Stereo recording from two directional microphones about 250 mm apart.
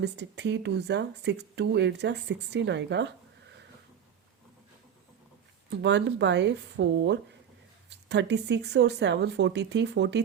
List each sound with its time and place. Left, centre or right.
0.0 s speech: right
5.8 s speech: right